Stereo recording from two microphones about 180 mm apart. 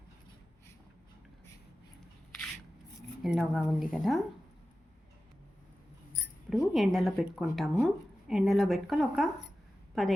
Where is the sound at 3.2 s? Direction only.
Centre (ahead or behind).